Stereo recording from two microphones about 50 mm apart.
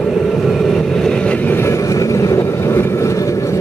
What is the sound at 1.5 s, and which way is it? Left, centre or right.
Vehicle, left.